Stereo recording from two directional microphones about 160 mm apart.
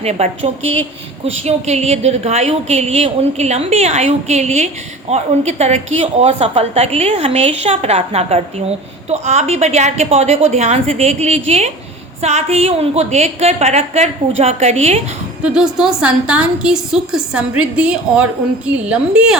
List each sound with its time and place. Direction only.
0.0 s a woman's voice: 40° right (ahead or behind)
15.4 s a woman's voice: 5° right (ahead or behind)